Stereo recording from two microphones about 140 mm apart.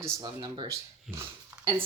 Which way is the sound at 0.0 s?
25° right (ahead or behind).